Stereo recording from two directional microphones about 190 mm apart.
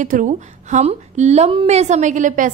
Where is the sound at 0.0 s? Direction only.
40° right (ahead or behind).